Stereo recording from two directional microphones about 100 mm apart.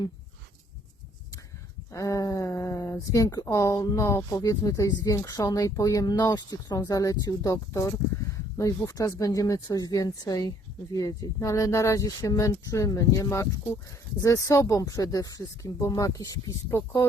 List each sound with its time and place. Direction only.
1.9 s speech: 35° left (ahead or behind)